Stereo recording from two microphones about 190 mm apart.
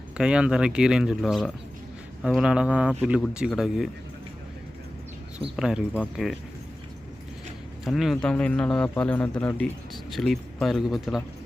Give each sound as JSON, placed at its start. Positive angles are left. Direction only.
{"t": 0.2, "sound": "speech", "side_deg": -5}
{"t": 5.5, "sound": "speech", "side_deg": -5}
{"t": 7.9, "sound": "speech", "side_deg": 0}